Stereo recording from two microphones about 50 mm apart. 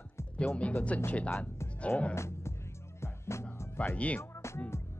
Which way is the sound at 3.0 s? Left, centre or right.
Left.